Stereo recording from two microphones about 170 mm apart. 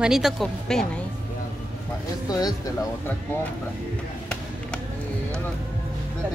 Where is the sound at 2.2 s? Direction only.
20° left (ahead or behind).